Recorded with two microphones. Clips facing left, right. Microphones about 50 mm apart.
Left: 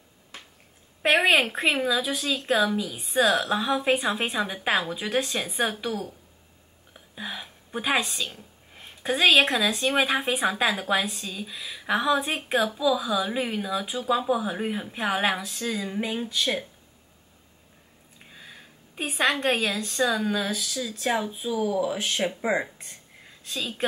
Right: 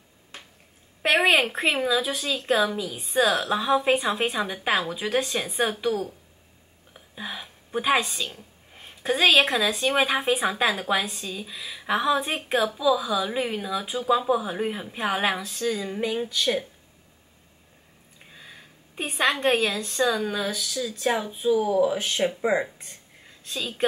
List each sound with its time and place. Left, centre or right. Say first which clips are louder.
1.0 s speech: even; centre
6.9 s a sound: even; centre
8.3 s speech: right 1 dB; centre
18.2 s a woman's voice: even; centre